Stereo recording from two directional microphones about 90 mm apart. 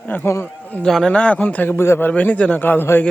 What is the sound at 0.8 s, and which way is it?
A man's voice, 5° left (ahead or behind).